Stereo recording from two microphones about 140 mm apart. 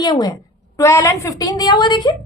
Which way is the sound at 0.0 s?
30° left (ahead or behind).